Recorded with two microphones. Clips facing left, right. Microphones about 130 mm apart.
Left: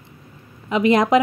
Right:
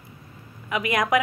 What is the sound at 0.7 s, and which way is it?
Speech, 25° left (ahead or behind).